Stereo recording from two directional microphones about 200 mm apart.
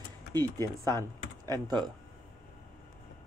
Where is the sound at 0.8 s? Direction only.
15° right (ahead or behind).